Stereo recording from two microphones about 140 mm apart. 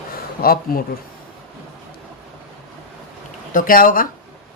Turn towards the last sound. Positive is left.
turn(degrees=80)